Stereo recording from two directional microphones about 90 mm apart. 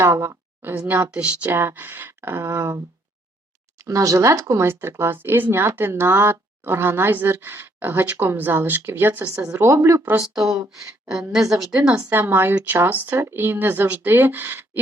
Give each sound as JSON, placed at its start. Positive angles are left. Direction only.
{"t": 0.0, "sound": "speech", "side_deg": -35}
{"t": 0.6, "sound": "speech", "side_deg": -20}
{"t": 10.3, "sound": "a woman's voice", "side_deg": -5}